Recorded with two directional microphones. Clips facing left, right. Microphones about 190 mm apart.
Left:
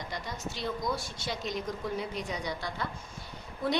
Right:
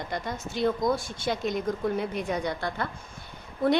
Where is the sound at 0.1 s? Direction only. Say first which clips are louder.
Right 5 dB; 50° right (ahead or behind).